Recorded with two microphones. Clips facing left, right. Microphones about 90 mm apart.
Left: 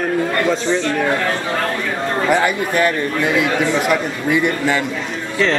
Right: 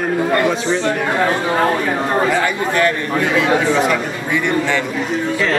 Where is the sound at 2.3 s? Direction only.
10° left (ahead or behind).